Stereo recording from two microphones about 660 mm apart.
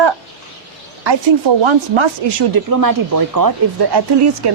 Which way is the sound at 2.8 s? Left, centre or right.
Right.